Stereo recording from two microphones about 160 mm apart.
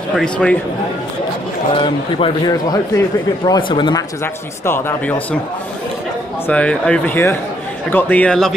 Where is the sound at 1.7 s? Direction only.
30° left (ahead or behind).